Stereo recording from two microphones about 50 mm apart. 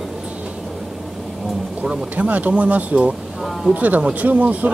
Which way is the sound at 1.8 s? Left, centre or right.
Right.